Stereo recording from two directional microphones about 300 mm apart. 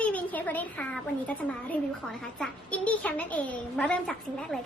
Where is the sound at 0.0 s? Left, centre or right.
Centre.